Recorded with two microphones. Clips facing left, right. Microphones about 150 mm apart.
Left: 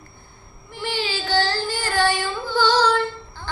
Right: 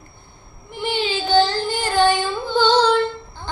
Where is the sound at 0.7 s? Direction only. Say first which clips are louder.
Right 4 dB; 20° right (ahead or behind).